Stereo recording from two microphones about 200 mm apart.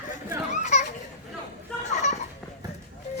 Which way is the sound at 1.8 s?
35° left (ahead or behind).